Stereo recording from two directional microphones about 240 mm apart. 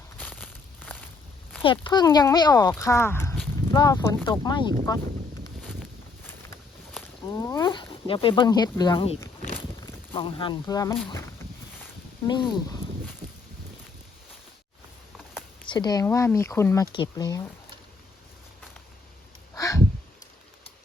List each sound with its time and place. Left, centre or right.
0.2 s crumpling: centre
1.6 s speech: centre
6.2 s a sound: centre
9.8 s speech: left
12.5 s speech: centre
15.6 s speech: centre
19.5 s a sound: centre